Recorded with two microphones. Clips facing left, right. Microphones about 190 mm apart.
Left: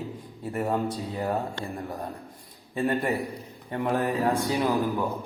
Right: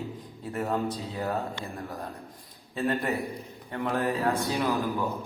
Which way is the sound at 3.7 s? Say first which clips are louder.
Left 2 dB; 15° left (ahead or behind).